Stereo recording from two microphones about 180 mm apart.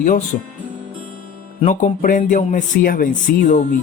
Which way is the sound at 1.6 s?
40° left (ahead or behind).